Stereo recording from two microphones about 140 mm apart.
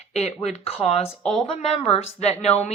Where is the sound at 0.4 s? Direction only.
50° left (ahead or behind).